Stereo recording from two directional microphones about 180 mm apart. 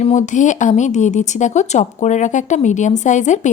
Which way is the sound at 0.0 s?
40° left (ahead or behind).